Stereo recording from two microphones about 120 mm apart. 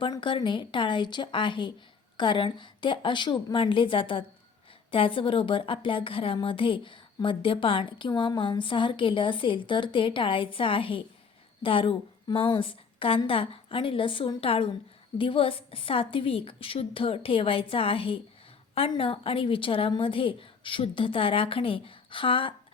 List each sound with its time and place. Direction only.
0.2 s a woman's voice: 45° left (ahead or behind)